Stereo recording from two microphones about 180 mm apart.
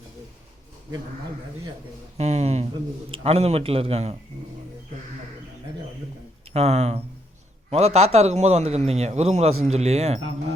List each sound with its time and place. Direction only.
2.1 s a man's voice: 35° right (ahead or behind)
6.5 s a man's voice: 35° right (ahead or behind)